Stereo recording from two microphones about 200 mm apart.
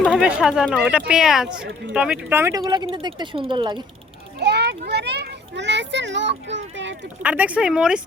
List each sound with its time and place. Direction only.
0.0 s speech: 5° right (ahead or behind); by 3.8 s 25° right (ahead or behind)
4.4 s a child's voice: 55° right (ahead or behind)
7.2 s speech: 5° right (ahead or behind)